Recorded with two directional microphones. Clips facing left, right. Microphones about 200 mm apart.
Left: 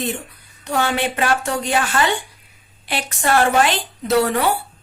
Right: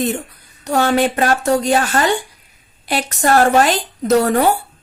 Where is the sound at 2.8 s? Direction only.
40° right (ahead or behind).